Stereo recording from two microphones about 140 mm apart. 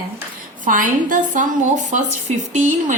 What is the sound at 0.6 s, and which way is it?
A woman's voice, 70° right (ahead or behind).